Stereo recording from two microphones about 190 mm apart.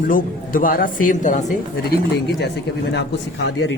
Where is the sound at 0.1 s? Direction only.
45° left (ahead or behind).